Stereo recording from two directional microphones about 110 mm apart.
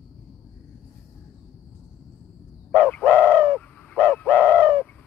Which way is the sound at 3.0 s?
15° right (ahead or behind).